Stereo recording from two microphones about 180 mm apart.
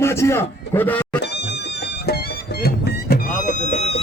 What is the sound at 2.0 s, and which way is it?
Music, 60° left (ahead or behind).